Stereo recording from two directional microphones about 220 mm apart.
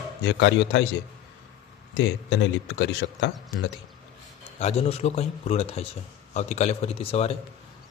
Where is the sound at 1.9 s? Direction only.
55° left (ahead or behind).